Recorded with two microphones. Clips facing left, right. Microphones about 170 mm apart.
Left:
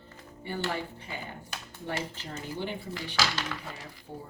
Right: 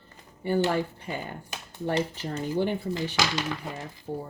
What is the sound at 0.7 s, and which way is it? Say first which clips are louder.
Speech: right 7 dB; 45° right (ahead or behind).